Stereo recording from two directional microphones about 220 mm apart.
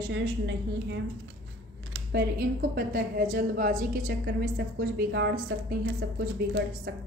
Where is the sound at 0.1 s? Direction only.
55° right (ahead or behind).